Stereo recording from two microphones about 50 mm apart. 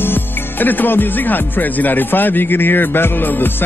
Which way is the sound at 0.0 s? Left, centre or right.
Left.